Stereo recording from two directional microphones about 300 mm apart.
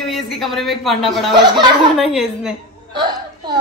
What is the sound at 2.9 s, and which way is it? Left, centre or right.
Speech, centre.